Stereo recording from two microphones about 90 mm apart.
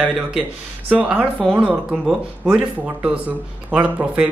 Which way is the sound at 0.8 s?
10° right (ahead or behind).